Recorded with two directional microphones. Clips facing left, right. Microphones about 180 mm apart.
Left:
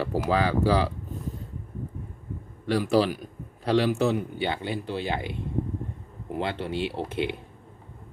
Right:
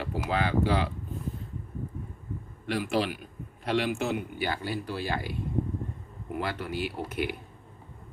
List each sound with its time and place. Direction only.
0.0 s speech: 40° left (ahead or behind)
2.6 s a man's voice: 35° left (ahead or behind)